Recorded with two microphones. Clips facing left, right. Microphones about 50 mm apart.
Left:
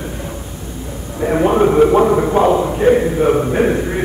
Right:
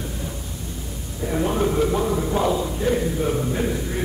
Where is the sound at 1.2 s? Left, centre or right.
Left.